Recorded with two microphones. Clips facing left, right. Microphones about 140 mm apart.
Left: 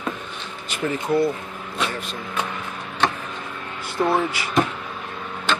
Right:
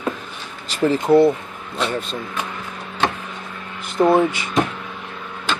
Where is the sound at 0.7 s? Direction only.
30° right (ahead or behind).